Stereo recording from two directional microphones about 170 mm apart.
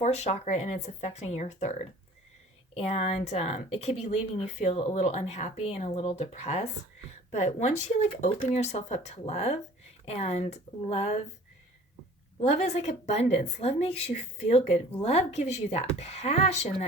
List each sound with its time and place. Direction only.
0.0 s speech: 40° left (ahead or behind)
12.4 s speech: 40° left (ahead or behind)